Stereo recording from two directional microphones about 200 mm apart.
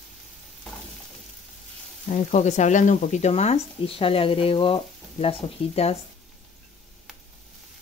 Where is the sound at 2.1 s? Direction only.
35° left (ahead or behind).